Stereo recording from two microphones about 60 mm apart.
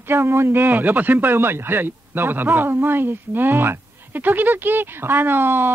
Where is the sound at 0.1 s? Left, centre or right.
Right.